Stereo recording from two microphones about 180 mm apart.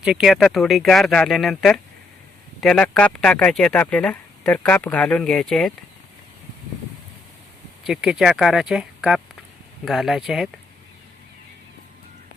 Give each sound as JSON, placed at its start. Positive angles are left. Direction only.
{"t": 0.0, "sound": "speech", "side_deg": -5}
{"t": 7.9, "sound": "speech", "side_deg": 0}